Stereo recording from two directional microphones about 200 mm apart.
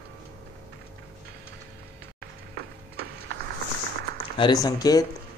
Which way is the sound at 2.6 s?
90° right.